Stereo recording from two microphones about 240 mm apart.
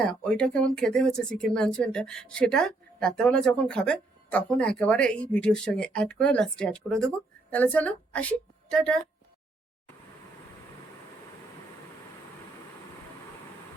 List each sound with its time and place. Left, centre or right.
0.0 s speech: centre